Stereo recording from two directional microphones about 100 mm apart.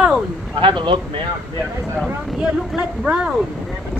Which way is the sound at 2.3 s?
10° right (ahead or behind).